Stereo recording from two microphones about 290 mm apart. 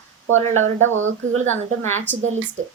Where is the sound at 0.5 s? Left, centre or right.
Right.